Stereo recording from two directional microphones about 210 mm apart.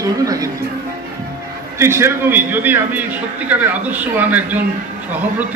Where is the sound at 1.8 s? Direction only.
10° right (ahead or behind).